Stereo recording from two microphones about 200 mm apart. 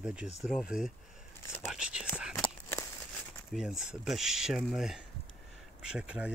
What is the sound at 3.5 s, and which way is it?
Speech, centre (ahead or behind).